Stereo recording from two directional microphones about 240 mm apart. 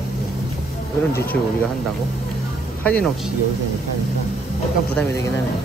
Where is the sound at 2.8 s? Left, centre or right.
Centre.